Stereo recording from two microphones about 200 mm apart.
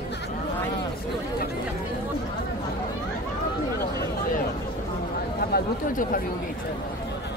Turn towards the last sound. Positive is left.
turn(degrees=45)  # may be behind; listen again after turning